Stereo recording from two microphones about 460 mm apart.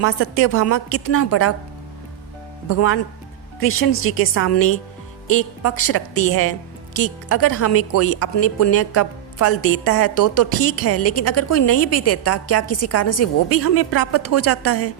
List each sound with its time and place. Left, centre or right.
0.0 s a woman's voice: left
2.6 s a woman's voice: left